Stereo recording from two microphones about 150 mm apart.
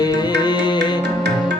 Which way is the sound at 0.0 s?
30° left (ahead or behind).